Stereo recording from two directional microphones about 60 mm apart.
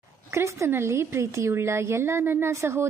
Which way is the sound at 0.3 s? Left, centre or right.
Right.